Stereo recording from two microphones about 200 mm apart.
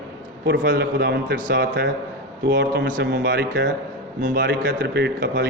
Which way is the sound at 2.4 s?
65° right (ahead or behind).